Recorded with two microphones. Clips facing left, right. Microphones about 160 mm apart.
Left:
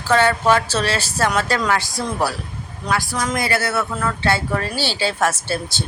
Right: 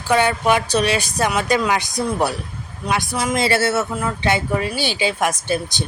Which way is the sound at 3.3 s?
25° right (ahead or behind).